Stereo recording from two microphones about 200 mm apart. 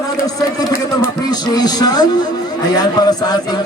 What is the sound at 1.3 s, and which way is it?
A man's voice, 20° left (ahead or behind).